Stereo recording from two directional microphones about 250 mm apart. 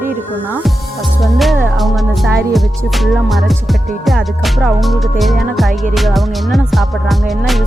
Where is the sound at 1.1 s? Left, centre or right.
Centre.